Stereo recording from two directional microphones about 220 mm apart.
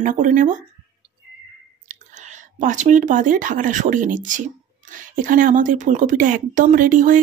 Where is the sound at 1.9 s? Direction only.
35° right (ahead or behind).